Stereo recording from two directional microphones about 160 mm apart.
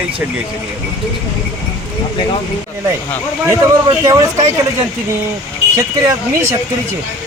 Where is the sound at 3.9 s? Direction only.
20° right (ahead or behind).